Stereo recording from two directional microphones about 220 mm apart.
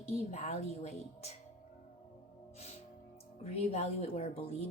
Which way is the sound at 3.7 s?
30° left (ahead or behind).